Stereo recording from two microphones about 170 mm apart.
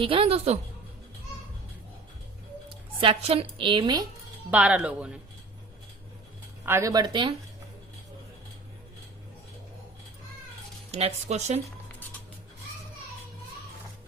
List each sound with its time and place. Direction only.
0.0 s a woman's voice: 30° right (ahead or behind)
3.0 s a woman's voice: 35° right (ahead or behind)
4.5 s speech: 5° right (ahead or behind)
6.7 s speech: 15° right (ahead or behind)
10.9 s a woman's voice: 40° right (ahead or behind)